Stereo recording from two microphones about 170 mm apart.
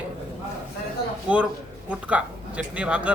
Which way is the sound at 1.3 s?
5° right (ahead or behind).